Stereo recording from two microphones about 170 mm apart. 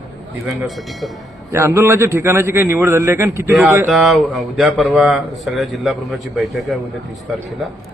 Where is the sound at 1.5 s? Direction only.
15° right (ahead or behind).